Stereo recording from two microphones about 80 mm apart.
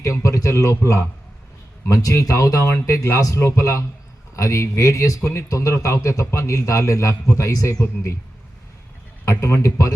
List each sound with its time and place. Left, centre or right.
0.0 s speech: left
9.2 s speech: left